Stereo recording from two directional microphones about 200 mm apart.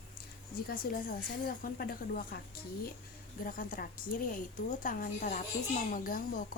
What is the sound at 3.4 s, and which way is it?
A woman's voice, 45° left (ahead or behind).